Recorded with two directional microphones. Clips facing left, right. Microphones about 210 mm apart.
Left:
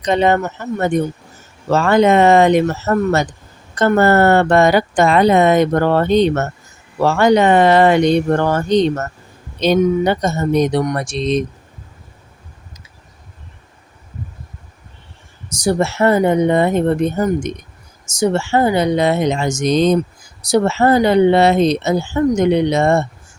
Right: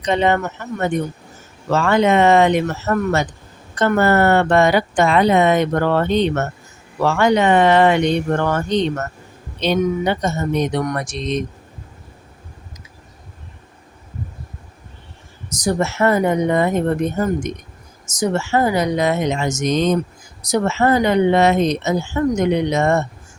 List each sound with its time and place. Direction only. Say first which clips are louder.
0.0 s speech: left 3 dB; 40° left (ahead or behind)
1.7 s speech: left 3 dB; 40° left (ahead or behind)
15.6 s speech: left 3 dB; 30° left (ahead or behind)